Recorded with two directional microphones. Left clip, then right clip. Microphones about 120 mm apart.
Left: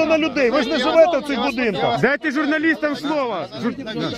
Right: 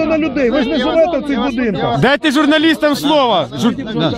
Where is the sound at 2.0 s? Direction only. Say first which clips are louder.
Right 7 dB; 45° right (ahead or behind).